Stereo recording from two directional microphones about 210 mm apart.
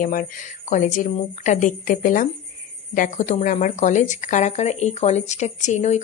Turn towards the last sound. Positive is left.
turn(degrees=35)  # may be behind; listen again after turning